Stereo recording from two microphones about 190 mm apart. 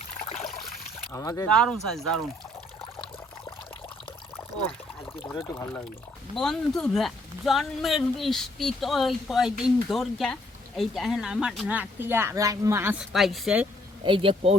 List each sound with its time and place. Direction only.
0.3 s trickle: 35° left (ahead or behind)
1.1 s speech: 15° left (ahead or behind)
1.6 s speech: centre (ahead or behind)
5.5 s speech: 15° left (ahead or behind)
6.3 s speech: 5° left (ahead or behind)
14.0 s speech: 25° right (ahead or behind)